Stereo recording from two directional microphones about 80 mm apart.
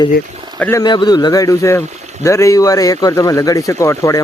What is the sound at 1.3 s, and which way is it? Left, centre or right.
Speech, left.